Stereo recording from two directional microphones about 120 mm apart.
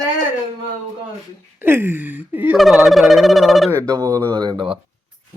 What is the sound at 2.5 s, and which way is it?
Speech, centre (ahead or behind).